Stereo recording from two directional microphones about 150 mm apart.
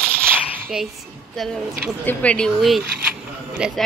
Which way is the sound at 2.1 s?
10° left (ahead or behind).